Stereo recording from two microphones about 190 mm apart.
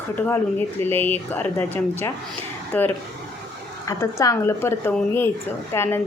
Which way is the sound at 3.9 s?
15° left (ahead or behind).